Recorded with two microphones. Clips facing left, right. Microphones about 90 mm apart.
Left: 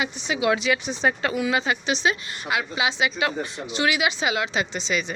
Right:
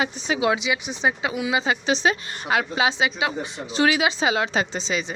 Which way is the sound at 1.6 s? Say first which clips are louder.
Right 2 dB; 30° right (ahead or behind).